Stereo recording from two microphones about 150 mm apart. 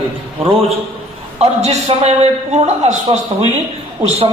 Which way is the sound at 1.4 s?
45° right (ahead or behind).